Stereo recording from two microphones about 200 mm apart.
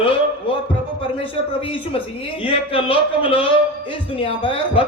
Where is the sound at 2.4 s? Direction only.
25° left (ahead or behind).